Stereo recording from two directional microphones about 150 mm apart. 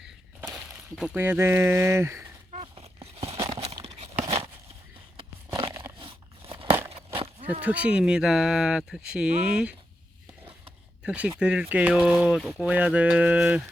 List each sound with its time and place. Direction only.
0.9 s speech: 10° right (ahead or behind)
2.5 s a sound: 45° right (ahead or behind)
6.0 s crumpling: 35° right (ahead or behind)
7.1 s a sound: 35° right (ahead or behind)
7.6 s speech: 10° right (ahead or behind)
11.0 s speech: 10° right (ahead or behind)